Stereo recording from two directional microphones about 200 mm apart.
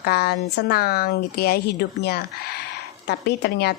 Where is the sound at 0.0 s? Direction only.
50° left (ahead or behind).